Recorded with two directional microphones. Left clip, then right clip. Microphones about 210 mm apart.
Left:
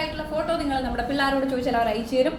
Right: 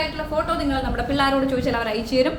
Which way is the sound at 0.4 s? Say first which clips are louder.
Right 2 dB; 15° right (ahead or behind).